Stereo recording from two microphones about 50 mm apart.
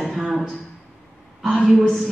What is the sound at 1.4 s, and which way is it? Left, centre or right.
Speech, centre.